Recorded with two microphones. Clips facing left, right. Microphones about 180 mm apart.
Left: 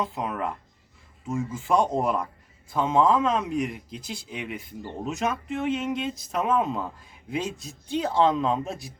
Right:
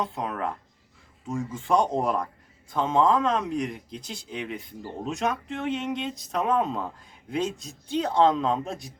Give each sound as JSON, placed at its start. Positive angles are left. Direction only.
{"t": 0.0, "sound": "speech", "side_deg": 5}